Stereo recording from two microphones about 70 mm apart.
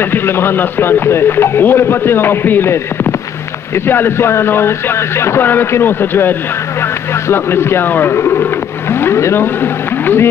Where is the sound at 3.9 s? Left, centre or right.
Left.